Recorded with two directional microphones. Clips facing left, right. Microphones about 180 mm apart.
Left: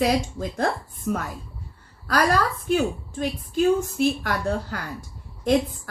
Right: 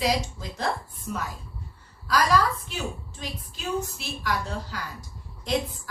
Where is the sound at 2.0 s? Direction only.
55° left (ahead or behind).